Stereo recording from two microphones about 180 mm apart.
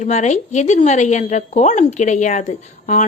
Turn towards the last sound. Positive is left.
turn(degrees=40)  # may be behind; listen again after turning